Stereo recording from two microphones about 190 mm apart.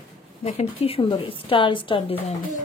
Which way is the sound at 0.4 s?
30° left (ahead or behind).